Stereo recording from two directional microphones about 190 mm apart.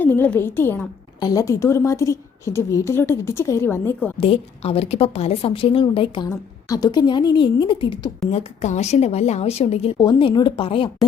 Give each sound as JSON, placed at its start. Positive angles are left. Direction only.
{"t": 0.0, "sound": "a woman's voice", "side_deg": 10}
{"t": 4.2, "sound": "a woman's voice", "side_deg": 30}
{"t": 6.2, "sound": "a woman's voice", "side_deg": 15}
{"t": 8.3, "sound": "a woman's voice", "side_deg": 35}